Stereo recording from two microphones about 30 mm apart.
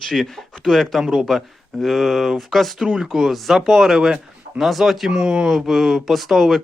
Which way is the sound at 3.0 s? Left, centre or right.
Centre.